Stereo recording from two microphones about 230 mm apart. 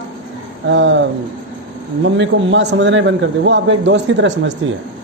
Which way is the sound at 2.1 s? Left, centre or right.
Right.